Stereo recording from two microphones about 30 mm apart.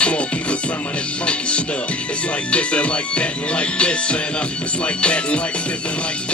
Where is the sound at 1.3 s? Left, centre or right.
Left.